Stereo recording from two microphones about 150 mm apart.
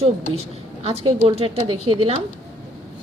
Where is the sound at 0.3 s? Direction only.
45° right (ahead or behind).